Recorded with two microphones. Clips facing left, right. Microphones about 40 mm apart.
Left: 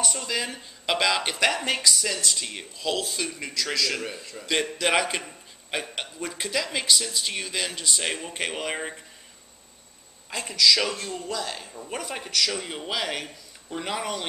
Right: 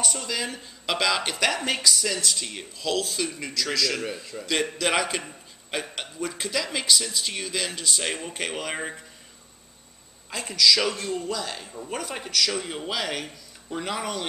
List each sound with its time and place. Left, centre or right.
0.0 s speech: centre
10.3 s speech: centre